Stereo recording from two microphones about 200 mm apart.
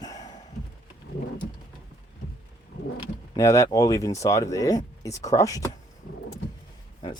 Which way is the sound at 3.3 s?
15° left (ahead or behind).